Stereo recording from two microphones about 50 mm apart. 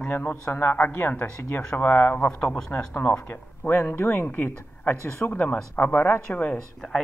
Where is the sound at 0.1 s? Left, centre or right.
Left.